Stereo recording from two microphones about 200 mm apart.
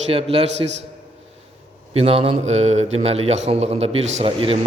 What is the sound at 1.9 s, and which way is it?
A man's voice, 30° right (ahead or behind).